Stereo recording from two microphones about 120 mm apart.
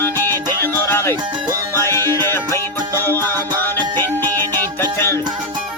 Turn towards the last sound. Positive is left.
turn(degrees=20)  # may be behind; listen again after turning